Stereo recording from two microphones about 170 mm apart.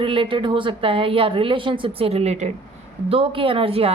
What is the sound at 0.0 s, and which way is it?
A woman's voice, 30° right (ahead or behind).